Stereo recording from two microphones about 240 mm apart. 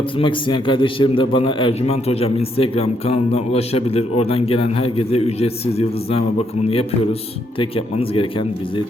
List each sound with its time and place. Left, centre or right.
0.2 s a man's voice: left
7.6 s a man's voice: left